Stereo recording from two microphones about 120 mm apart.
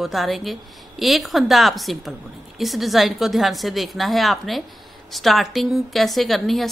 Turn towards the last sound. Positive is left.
turn(degrees=0)  # may be behind; listen again after turning